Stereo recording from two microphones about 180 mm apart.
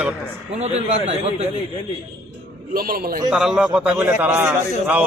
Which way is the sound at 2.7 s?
55° right (ahead or behind).